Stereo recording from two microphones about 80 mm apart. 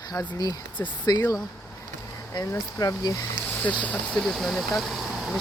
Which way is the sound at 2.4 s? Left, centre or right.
Left.